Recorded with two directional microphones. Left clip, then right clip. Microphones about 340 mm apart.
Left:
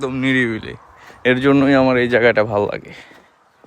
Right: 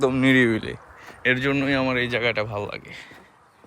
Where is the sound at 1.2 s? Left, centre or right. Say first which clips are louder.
Left 7 dB; centre.